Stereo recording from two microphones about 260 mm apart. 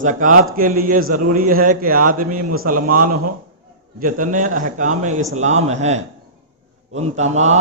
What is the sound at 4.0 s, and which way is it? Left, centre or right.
A man's voice, right.